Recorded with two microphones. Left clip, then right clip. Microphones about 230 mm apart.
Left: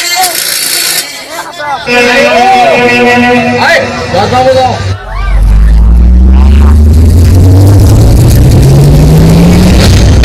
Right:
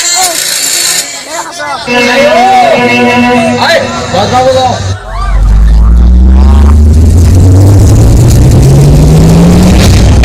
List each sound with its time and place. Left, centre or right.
1.9 s music: left
8.6 s vehicle: left
9.4 s music: left